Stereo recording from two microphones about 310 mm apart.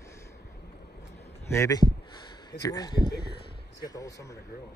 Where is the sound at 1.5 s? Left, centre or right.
Centre.